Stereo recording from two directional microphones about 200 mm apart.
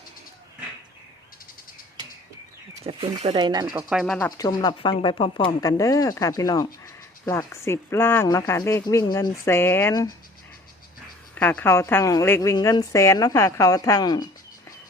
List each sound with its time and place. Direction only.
2.8 s speech: 30° right (ahead or behind)
3.8 s speech: centre (ahead or behind)
4.3 s speech: 20° left (ahead or behind)
11.3 s speech: 10° left (ahead or behind)